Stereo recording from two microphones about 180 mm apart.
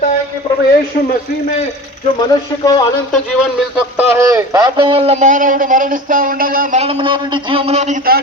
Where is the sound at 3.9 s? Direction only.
15° right (ahead or behind); by 6.8 s 50° right (ahead or behind).